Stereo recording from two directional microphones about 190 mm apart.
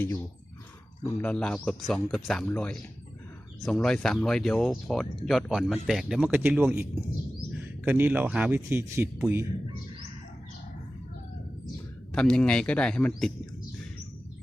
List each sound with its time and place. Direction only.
1.2 s a man's voice: 5° left (ahead or behind); by 6.8 s 10° right (ahead or behind)
7.9 s a man's voice: 10° right (ahead or behind)
12.1 s speech: 5° left (ahead or behind)